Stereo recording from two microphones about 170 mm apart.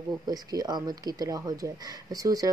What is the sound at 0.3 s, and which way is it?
Speech, 20° right (ahead or behind).